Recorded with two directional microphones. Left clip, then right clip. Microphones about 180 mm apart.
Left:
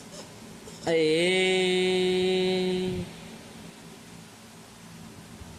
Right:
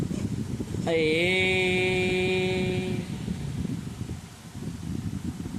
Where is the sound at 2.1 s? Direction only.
20° left (ahead or behind).